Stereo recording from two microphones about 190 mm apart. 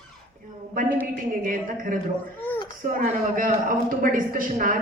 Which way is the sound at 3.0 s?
45° right (ahead or behind).